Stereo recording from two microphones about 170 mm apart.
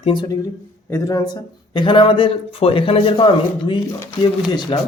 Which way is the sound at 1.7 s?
30° left (ahead or behind).